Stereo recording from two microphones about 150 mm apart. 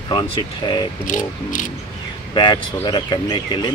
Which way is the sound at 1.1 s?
60° left (ahead or behind).